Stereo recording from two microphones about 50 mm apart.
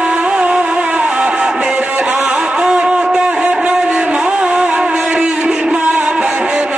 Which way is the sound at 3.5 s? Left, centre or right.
Right.